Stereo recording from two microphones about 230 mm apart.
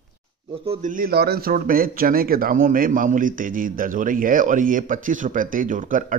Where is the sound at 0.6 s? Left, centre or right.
Right.